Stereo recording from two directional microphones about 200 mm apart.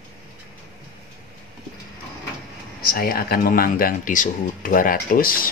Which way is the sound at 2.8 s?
45° left (ahead or behind).